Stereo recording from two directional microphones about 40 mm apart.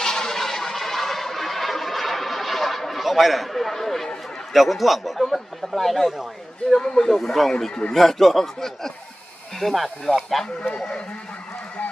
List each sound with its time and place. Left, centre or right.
0.0 s a sound: centre
4.5 s a man's voice: centre
6.7 s a man's voice: centre
10.6 s speech: left